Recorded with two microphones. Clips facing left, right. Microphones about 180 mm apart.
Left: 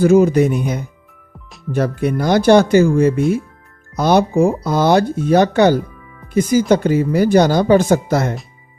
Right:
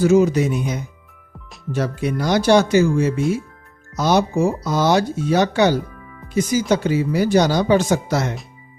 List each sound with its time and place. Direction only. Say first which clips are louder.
0.0 s speech: left 4 dB; 55° left (ahead or behind)